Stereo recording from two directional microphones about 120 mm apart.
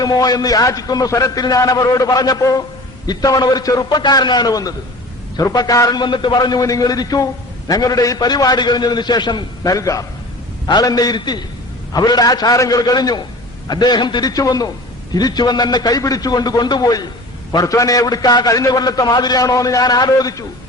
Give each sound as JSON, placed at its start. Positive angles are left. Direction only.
{"t": 0.0, "sound": "a man's voice", "side_deg": 30}